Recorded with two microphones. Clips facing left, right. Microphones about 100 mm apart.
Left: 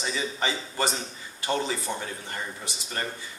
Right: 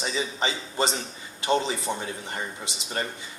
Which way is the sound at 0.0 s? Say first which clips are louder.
Right 1 dB; 20° right (ahead or behind).